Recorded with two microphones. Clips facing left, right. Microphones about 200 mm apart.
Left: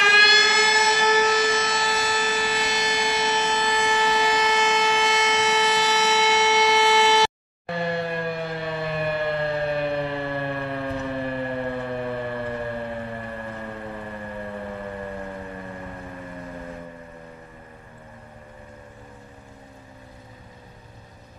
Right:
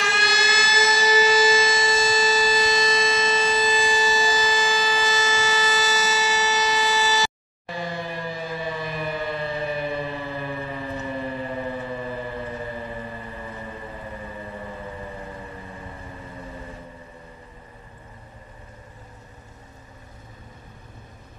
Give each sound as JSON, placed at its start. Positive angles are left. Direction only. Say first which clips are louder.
{"t": 0.0, "sound": "siren", "louder": "left 2 dB", "side_deg": 65}